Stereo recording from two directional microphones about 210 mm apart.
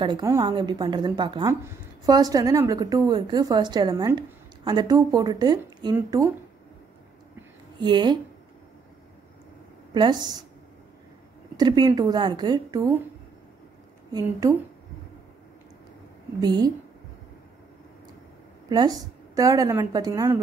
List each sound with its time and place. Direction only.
0.0 s a woman's voice: 20° right (ahead or behind)
7.8 s a woman's voice: 20° right (ahead or behind)
9.9 s a woman's voice: 20° right (ahead or behind)
11.5 s a woman's voice: 20° right (ahead or behind)
14.1 s a woman's voice: 15° right (ahead or behind)
16.3 s a woman's voice: 20° right (ahead or behind)
18.7 s a woman's voice: 20° right (ahead or behind)